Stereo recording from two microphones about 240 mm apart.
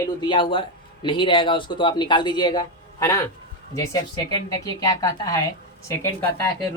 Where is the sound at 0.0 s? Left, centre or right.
Centre.